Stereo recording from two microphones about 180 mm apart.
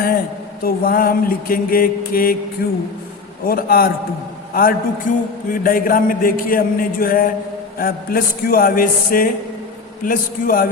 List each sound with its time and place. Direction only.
0.6 s a man's voice: 55° left (ahead or behind)